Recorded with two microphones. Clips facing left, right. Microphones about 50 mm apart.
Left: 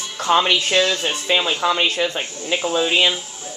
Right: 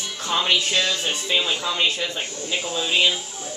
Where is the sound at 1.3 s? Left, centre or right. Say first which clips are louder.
Left 6 dB; left.